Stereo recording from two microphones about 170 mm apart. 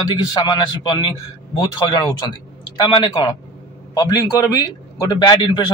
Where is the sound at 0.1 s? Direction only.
25° left (ahead or behind).